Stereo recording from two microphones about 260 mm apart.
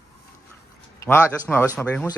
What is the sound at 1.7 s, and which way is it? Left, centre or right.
Speech, centre.